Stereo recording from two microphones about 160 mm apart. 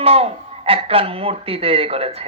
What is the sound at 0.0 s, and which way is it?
Speech, 40° right (ahead or behind).